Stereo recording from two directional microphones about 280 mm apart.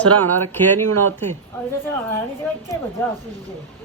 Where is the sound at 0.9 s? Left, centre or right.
Right.